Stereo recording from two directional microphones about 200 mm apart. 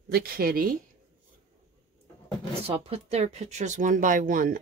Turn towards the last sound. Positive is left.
turn(degrees=-45)  # may be behind; listen again after turning